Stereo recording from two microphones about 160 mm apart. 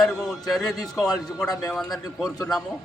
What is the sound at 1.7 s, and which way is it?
Speech, centre (ahead or behind).